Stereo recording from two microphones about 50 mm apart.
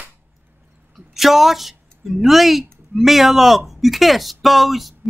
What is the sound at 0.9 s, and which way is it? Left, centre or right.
A woman's voice, centre.